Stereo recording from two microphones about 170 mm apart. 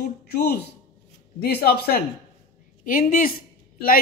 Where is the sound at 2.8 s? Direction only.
55° left (ahead or behind).